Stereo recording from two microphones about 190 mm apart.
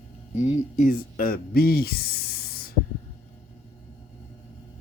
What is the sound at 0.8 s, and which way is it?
Speech, 50° left (ahead or behind).